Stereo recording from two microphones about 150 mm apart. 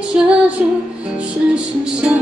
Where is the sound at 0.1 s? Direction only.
10° right (ahead or behind).